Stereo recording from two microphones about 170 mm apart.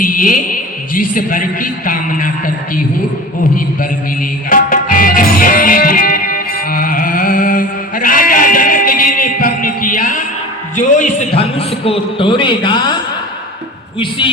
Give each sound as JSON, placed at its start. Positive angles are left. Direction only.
{"t": 0.0, "sound": "a man's voice", "side_deg": 55}
{"t": 4.4, "sound": "music", "side_deg": 55}
{"t": 10.8, "sound": "a sound", "side_deg": 45}
{"t": 11.3, "sound": "a man's voice", "side_deg": 35}